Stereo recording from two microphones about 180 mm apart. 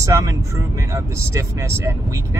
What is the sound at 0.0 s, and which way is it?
Speech, 20° right (ahead or behind).